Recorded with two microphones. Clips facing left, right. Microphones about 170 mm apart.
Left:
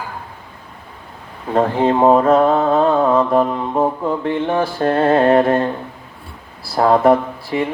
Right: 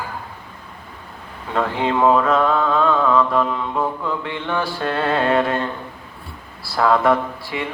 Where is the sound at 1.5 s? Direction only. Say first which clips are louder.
Left 5 dB; 40° left (ahead or behind).